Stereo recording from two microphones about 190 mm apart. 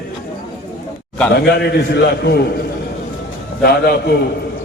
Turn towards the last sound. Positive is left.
turn(degrees=55)  # may be behind; listen again after turning